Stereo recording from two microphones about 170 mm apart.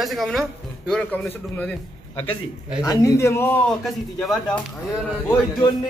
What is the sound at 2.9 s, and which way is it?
Speech, 20° left (ahead or behind).